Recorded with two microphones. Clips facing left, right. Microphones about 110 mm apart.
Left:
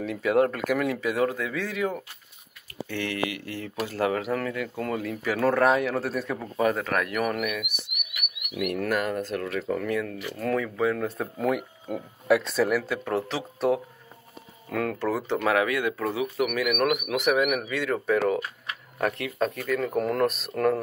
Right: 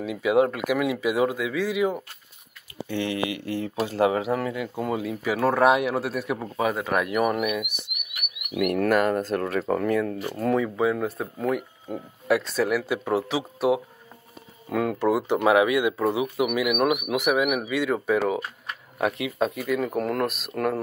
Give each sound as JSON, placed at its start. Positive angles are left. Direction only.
{"t": 0.0, "sound": "speech", "side_deg": -10}
{"t": 2.9, "sound": "speech", "side_deg": -20}
{"t": 8.5, "sound": "speech", "side_deg": -50}
{"t": 11.1, "sound": "speech", "side_deg": 0}
{"t": 12.8, "sound": "speech", "side_deg": -10}